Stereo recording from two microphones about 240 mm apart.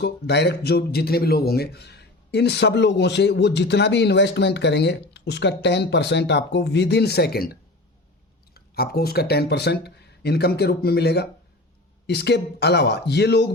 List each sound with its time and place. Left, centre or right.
0.0 s speech: left
8.5 s speech: left